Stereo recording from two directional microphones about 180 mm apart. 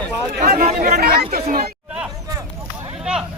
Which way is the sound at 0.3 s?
55° right (ahead or behind).